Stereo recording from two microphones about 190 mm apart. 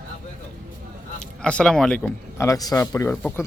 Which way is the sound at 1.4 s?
5° left (ahead or behind).